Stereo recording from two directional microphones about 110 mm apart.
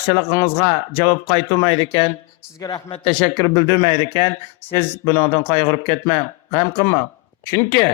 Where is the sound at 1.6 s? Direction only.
40° left (ahead or behind); by 7.0 s 25° left (ahead or behind).